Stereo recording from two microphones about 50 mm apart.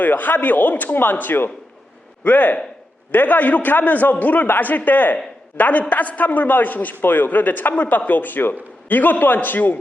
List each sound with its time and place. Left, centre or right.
0.0 s a man's voice: left